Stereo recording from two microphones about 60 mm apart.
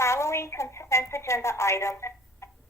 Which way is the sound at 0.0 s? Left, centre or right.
Left.